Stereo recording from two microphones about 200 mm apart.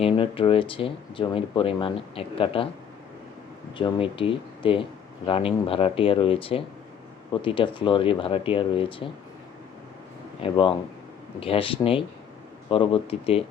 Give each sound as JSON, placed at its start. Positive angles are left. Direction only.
{"t": 0.0, "sound": "speech", "side_deg": 25}
{"t": 3.8, "sound": "speech", "side_deg": 25}
{"t": 10.4, "sound": "speech", "side_deg": 25}